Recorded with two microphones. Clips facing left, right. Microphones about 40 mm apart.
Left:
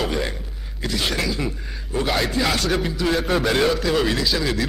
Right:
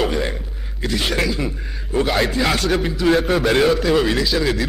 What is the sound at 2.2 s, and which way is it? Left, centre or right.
A man's voice, centre.